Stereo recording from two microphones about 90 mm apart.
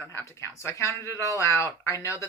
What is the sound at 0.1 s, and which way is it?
Speech, 30° left (ahead or behind).